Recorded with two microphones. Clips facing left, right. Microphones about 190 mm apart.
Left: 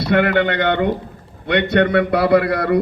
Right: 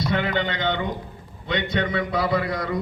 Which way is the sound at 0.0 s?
65° left (ahead or behind).